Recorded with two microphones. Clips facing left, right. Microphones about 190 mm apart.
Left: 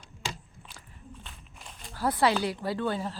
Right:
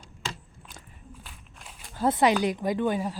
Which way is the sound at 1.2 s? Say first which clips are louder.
Even; 5° right (ahead or behind).